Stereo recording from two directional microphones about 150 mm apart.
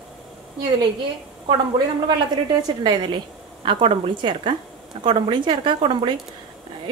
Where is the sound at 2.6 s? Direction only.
25° right (ahead or behind).